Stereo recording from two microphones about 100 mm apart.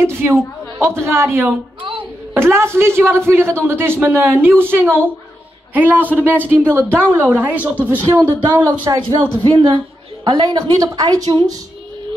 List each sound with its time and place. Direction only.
0.0 s a man's voice: 25° right (ahead or behind)
8.5 s speech: 35° right (ahead or behind)
9.4 s a woman's voice: 45° right (ahead or behind)